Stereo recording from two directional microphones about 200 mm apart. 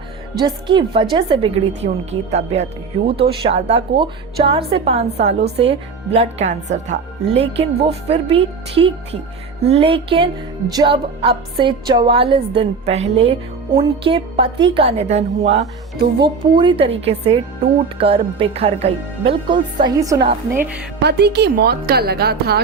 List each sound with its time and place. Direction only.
0.3 s a woman's voice: 20° right (ahead or behind)
16.2 s speech: 25° right (ahead or behind)
21.0 s a woman's voice: 55° right (ahead or behind)